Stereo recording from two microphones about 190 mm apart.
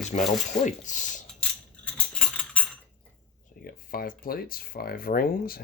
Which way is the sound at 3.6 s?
50° left (ahead or behind).